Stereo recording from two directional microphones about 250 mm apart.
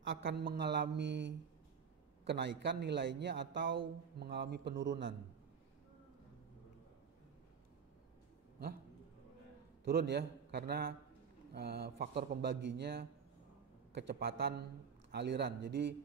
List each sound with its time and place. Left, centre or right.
0.0 s a man's voice: right
9.8 s a man's voice: right